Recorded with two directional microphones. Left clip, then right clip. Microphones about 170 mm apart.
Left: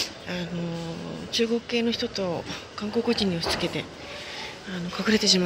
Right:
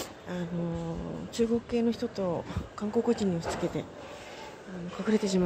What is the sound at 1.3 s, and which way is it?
Speech, 20° right (ahead or behind).